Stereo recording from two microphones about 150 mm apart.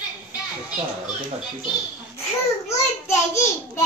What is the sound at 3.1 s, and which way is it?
Speech, 20° left (ahead or behind).